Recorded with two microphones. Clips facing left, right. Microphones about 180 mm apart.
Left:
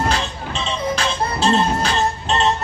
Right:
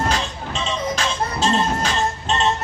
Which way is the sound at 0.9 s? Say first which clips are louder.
Left 2 dB; 35° left (ahead or behind).